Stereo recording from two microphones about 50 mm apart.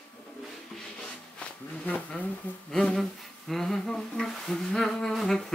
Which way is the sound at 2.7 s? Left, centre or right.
Centre.